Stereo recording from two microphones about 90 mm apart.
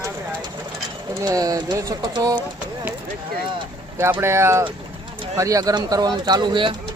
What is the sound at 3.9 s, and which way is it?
Speech, 30° right (ahead or behind).